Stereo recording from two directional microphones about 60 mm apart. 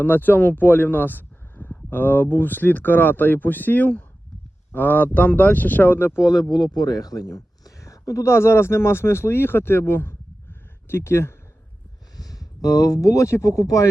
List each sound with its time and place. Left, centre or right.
0.0 s speech: left
6.8 s speech: left
12.1 s speech: left